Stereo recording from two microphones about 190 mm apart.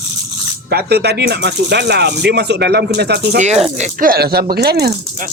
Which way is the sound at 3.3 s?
35° right (ahead or behind).